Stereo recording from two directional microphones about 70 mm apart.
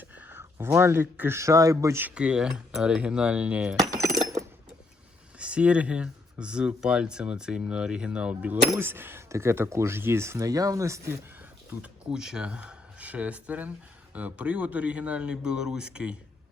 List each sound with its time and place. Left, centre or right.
0.0 s a sound: right
1.1 s speech: right
1.4 s speech: right
2.1 s speech: centre
3.8 s coin: right
5.4 s speech: centre
8.8 s speech: right
11.7 s speech: centre